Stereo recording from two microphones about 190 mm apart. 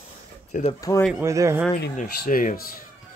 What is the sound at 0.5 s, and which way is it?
Speech, 40° left (ahead or behind).